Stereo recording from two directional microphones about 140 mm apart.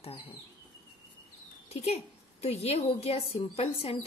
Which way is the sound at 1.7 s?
50° left (ahead or behind).